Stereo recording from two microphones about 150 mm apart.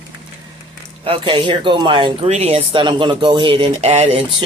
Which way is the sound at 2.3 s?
45° right (ahead or behind).